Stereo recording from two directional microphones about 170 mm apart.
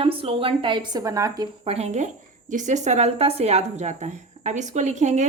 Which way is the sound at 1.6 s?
40° right (ahead or behind).